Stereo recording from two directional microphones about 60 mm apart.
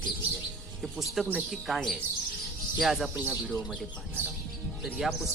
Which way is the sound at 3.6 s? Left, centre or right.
Right.